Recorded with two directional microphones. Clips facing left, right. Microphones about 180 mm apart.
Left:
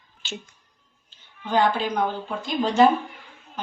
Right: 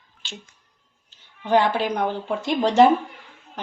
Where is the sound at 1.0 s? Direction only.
70° right (ahead or behind).